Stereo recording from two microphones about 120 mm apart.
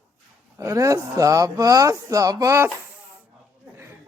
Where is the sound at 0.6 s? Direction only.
25° right (ahead or behind).